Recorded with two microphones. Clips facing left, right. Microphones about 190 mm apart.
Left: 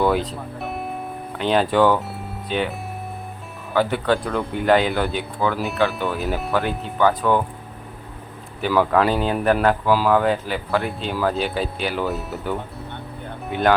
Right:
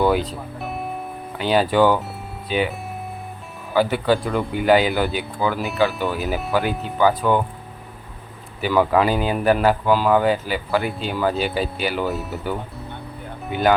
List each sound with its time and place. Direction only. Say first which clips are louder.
0.0 s music: right 1 dB; centre (ahead or behind)
1.4 s speech: right 1 dB; 5° right (ahead or behind)
8.6 s speech: even; centre (ahead or behind)